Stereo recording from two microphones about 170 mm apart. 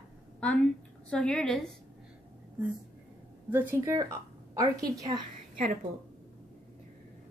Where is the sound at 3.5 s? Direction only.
15° right (ahead or behind).